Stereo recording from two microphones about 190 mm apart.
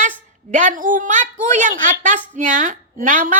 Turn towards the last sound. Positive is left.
turn(degrees=-45)  # may be behind; listen again after turning